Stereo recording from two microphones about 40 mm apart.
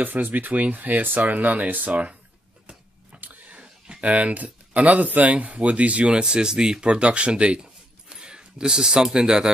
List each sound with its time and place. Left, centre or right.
0.0 s speech: right
1.9 s speech: right
3.2 s a sound: right
4.0 s speech: right
6.2 s speech: centre
7.6 s a sound: right